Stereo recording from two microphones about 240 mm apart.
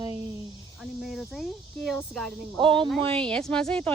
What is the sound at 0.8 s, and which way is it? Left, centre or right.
Speech, centre.